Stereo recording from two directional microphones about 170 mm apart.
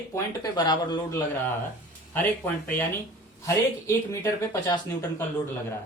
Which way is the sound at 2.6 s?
10° left (ahead or behind).